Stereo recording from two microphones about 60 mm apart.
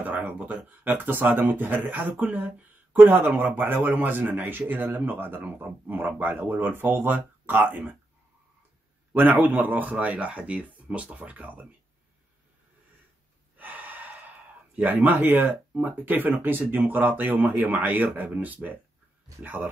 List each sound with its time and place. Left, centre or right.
0.0 s a man's voice: right
9.1 s speech: right
13.6 s gasp: right
14.8 s a man's voice: right